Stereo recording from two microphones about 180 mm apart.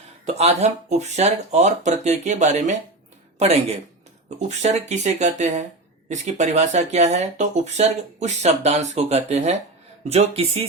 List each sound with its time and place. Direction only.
0.3 s speech: 35° right (ahead or behind)